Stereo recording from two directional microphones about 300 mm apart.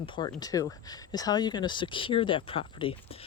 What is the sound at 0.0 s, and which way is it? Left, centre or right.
Speech, centre.